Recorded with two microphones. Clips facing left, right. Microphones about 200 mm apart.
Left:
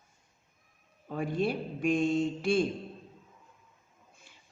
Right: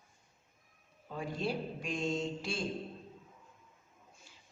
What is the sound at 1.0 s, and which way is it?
A man's voice, 55° left (ahead or behind).